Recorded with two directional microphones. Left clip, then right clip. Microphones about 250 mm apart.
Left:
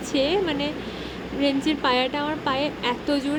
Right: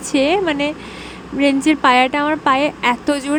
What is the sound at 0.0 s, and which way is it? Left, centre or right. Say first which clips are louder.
Speech: right 7 dB; right.